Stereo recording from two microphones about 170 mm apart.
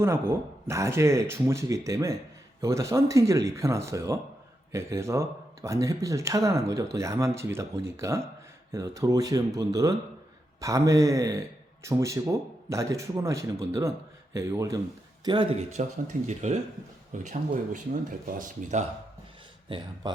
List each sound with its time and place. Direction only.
0.0 s speech: 15° right (ahead or behind); by 18.9 s 45° right (ahead or behind)
19.6 s speech: 30° right (ahead or behind)